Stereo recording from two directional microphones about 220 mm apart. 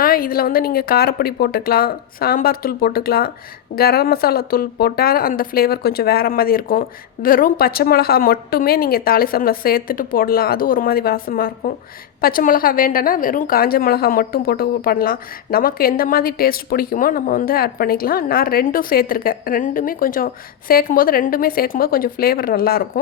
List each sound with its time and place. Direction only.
0.0 s a woman's voice: 40° left (ahead or behind)